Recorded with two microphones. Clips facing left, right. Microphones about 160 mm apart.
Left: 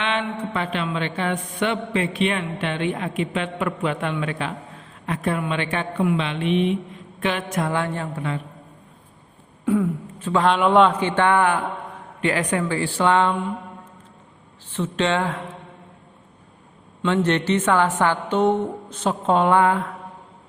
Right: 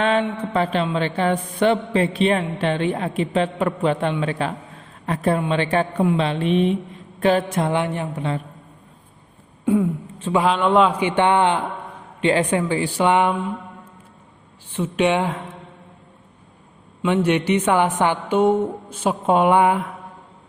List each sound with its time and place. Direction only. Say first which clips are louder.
0.0 s a man's voice: right 5 dB; 40° right (ahead or behind)
7.6 s a woman's voice: right 3 dB; 20° right (ahead or behind)
9.6 s a sound: right 2 dB; 25° right (ahead or behind)
10.3 s a man's voice: even; 5° right (ahead or behind)
11.0 s a woman's voice: right 1 dB; 15° right (ahead or behind)
14.8 s a woman's voice: right 3 dB; 15° right (ahead or behind)
17.1 s a woman's voice: right 2 dB; 10° right (ahead or behind)